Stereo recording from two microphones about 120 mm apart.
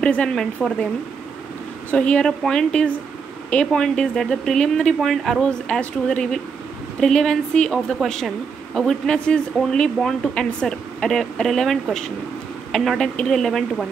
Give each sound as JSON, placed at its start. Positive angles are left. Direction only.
{"t": 0.0, "sound": "a woman's voice", "side_deg": 10}
{"t": 1.9, "sound": "a woman's voice", "side_deg": 10}